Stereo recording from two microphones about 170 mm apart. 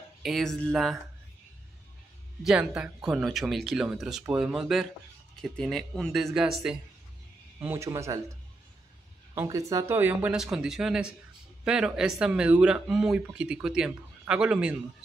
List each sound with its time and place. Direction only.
0.2 s speech: centre (ahead or behind)
2.4 s speech: 5° right (ahead or behind)
7.6 s speech: 15° right (ahead or behind)
9.3 s speech: 15° right (ahead or behind)